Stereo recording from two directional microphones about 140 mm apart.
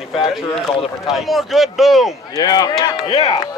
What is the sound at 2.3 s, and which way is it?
Speech, 30° left (ahead or behind).